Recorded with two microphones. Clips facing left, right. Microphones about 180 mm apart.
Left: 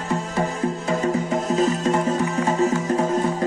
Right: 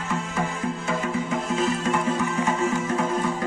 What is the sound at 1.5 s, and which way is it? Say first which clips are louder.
Music: left 4 dB; 35° left (ahead or behind).